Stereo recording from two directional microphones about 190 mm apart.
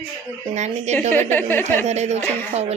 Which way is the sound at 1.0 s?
10° left (ahead or behind).